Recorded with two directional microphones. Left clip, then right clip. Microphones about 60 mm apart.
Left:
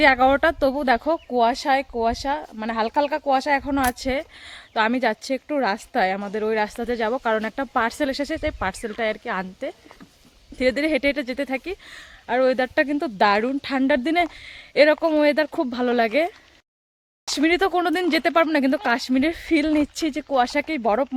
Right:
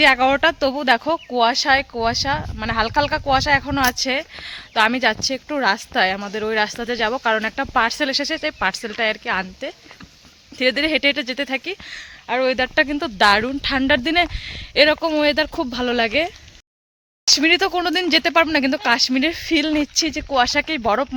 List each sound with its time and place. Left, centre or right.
0.0 s speech: left
10.6 s speech: left
11.9 s speech: left
12.6 s speech: left
15.6 s speech: centre
17.4 s speech: centre
20.0 s speech: left
20.6 s speech: centre